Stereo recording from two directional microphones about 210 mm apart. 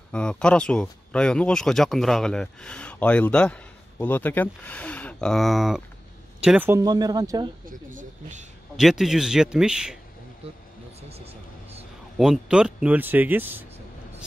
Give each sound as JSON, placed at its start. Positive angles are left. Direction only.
{"t": 0.1, "sound": "speech", "side_deg": 5}
{"t": 7.9, "sound": "speech", "side_deg": -35}
{"t": 8.7, "sound": "speech", "side_deg": 0}
{"t": 11.0, "sound": "vehicle", "side_deg": -30}
{"t": 12.2, "sound": "speech", "side_deg": -5}